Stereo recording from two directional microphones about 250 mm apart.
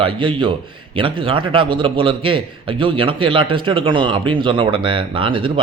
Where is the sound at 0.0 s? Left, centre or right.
Centre.